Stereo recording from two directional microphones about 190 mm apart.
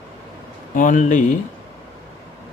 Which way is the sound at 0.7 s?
45° left (ahead or behind).